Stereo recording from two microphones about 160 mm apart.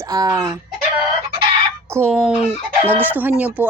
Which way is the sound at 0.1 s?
25° right (ahead or behind).